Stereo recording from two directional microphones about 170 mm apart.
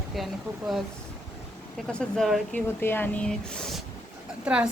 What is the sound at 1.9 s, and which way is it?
Speech, 5° left (ahead or behind).